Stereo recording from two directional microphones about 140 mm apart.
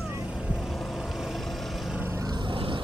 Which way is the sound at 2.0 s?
20° right (ahead or behind).